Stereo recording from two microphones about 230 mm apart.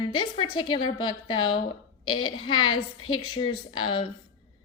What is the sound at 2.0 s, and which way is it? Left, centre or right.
A woman's voice, left.